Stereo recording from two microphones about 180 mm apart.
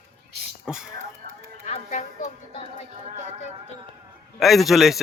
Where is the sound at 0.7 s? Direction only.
5° right (ahead or behind).